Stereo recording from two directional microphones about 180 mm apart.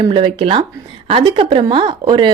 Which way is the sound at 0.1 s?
25° right (ahead or behind).